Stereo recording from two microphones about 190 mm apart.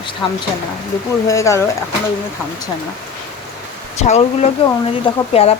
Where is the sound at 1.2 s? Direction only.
15° left (ahead or behind).